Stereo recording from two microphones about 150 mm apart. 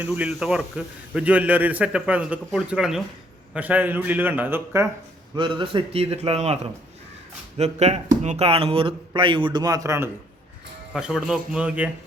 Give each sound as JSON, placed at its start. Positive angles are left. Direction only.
{"t": 0.0, "sound": "a man's voice", "side_deg": -10}
{"t": 5.4, "sound": "speech", "side_deg": -35}
{"t": 7.6, "sound": "speech", "side_deg": -45}
{"t": 10.9, "sound": "speech", "side_deg": -5}